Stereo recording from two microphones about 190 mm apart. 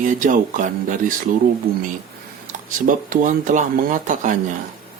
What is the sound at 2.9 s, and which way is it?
Speech, 45° right (ahead or behind).